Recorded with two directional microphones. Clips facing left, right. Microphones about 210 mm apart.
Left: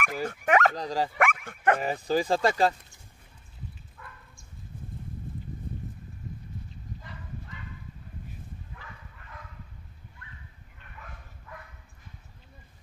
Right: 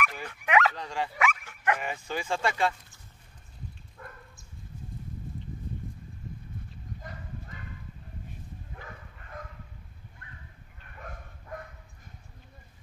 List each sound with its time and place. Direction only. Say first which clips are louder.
0.0 s speech: left 4 dB; 45° left (ahead or behind)
1.1 s dog: left 3 dB; 55° left (ahead or behind)
1.8 s speech: left 8 dB; 35° left (ahead or behind)
4.0 s a sound: right 4 dB; 35° right (ahead or behind)
7.0 s bow-wow: right 1 dB; 45° right (ahead or behind)
8.7 s bow-wow: right 3 dB; 45° right (ahead or behind)
11.0 s dog: right 5 dB; 45° right (ahead or behind)